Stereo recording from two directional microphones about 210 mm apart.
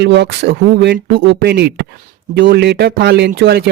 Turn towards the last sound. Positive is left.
turn(degrees=-50)  # may be behind; listen again after turning